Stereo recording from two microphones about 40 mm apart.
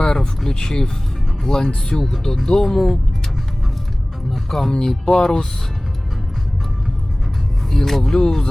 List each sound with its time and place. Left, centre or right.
0.0 s a sound: centre
1.5 s speech: centre
4.3 s music: centre
5.0 s speech: centre
7.7 s speech: centre